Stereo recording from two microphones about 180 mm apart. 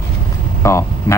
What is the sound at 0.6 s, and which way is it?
Vehicle, 15° left (ahead or behind).